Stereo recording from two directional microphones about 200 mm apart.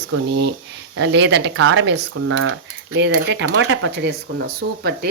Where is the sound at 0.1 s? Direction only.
60° right (ahead or behind); by 2.5 s 80° right.